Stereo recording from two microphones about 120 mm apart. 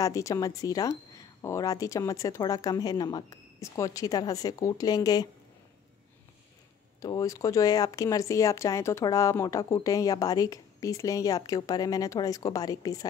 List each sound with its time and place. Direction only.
0.0 s a woman's voice: 25° left (ahead or behind)
7.0 s a woman's voice: 30° left (ahead or behind)